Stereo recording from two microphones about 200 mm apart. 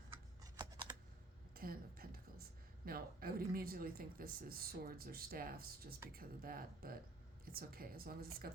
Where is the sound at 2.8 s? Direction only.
50° right (ahead or behind).